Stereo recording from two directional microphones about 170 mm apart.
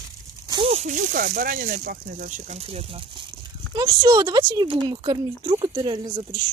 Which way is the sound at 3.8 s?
20° right (ahead or behind).